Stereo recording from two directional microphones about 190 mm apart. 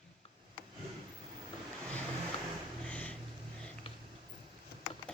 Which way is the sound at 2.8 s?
10° left (ahead or behind).